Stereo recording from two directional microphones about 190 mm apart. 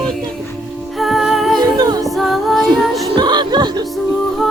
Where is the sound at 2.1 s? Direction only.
Centre (ahead or behind).